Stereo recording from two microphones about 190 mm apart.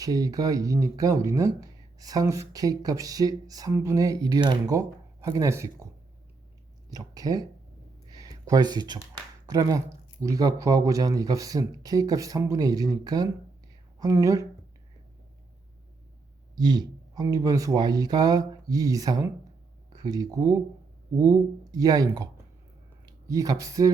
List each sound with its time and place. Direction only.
0.0 s speech: 20° right (ahead or behind)
6.9 s speech: 20° right (ahead or behind)
8.1 s a sound: 20° right (ahead or behind)
9.5 s speech: 20° right (ahead or behind)
16.6 s speech: 20° right (ahead or behind)